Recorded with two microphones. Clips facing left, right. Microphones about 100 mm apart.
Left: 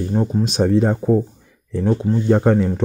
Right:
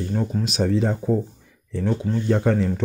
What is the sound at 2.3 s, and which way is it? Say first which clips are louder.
Speech: left 5 dB; 40° left (ahead or behind).